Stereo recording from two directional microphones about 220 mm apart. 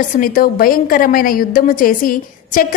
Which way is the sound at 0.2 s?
40° left (ahead or behind).